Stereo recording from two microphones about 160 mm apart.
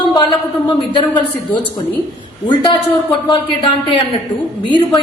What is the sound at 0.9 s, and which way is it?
Speech, 30° left (ahead or behind).